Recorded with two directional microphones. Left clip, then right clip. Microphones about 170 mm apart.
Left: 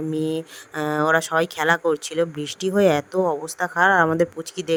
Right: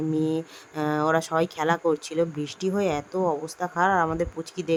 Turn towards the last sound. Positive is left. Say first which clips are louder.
# left 3 dB
turn(degrees=25)  # may be behind; listen again after turning